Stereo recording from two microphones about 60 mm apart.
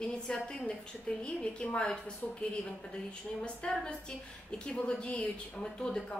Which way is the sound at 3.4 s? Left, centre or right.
Centre.